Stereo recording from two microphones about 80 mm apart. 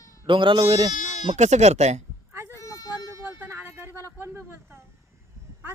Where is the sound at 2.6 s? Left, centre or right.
Left.